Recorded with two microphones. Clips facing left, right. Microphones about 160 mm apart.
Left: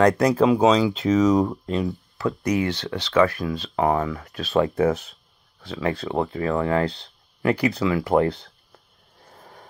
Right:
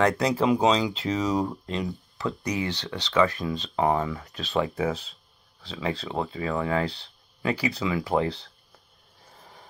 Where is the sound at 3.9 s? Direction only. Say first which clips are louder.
Left 3 dB; 20° right (ahead or behind).